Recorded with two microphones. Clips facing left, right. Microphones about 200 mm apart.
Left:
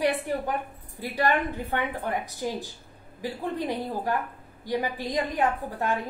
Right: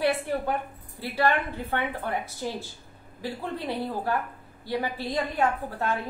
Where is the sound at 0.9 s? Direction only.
15° left (ahead or behind).